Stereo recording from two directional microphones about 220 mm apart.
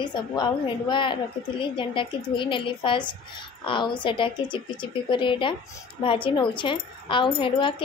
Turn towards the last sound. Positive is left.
turn(degrees=25)  # may be behind; listen again after turning